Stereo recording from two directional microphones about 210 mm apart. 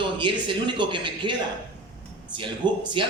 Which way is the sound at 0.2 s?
20° right (ahead or behind).